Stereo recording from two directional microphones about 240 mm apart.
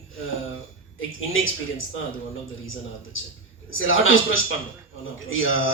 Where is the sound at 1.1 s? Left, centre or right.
Left.